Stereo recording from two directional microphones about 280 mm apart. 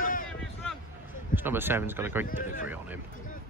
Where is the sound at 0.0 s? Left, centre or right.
Left.